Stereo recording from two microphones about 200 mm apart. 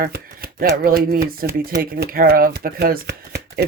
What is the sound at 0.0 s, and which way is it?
Speech, 50° right (ahead or behind).